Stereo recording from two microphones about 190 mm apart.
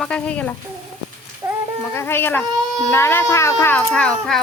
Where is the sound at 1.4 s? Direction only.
20° right (ahead or behind).